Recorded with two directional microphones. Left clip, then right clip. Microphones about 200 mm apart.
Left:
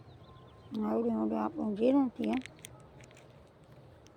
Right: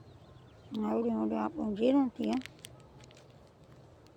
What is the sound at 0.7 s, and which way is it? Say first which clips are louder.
Speech: even; centre (ahead or behind).